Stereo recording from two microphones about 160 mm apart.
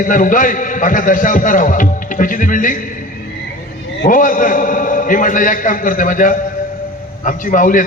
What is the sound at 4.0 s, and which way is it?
A man's voice, 55° left (ahead or behind).